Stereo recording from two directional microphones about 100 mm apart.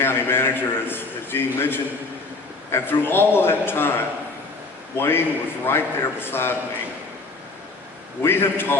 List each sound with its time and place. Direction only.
0.0 s a sound: 25° left (ahead or behind)
1.5 s a man's voice: 20° left (ahead or behind)
8.2 s a man's voice: 25° left (ahead or behind)